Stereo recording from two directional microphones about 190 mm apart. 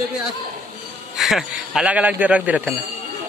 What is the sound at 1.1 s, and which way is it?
A man's voice, centre (ahead or behind).